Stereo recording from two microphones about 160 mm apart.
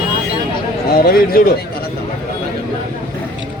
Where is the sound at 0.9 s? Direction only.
70° left (ahead or behind).